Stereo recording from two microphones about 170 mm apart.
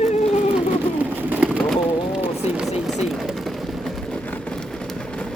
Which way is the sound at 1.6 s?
Centre (ahead or behind).